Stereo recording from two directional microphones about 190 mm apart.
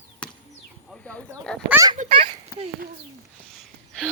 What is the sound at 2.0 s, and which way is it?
Speech, 30° right (ahead or behind).